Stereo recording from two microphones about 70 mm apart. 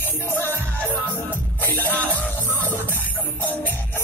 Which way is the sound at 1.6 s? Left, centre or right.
Left.